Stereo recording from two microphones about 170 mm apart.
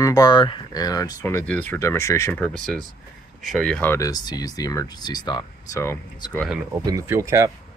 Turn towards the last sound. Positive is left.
turn(degrees=-15)  # may be behind; listen again after turning